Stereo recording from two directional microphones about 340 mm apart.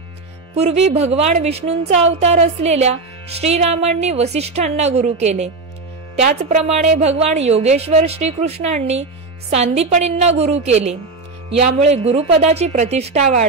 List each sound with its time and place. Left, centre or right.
0.6 s a woman's voice: centre